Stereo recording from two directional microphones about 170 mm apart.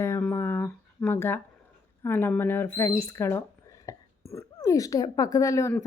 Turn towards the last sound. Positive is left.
turn(degrees=15)  # may be behind; listen again after turning